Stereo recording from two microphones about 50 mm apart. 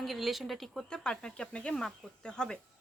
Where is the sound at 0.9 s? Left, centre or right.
Centre.